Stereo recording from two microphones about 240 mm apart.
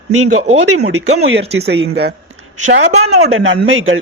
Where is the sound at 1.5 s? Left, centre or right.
Right.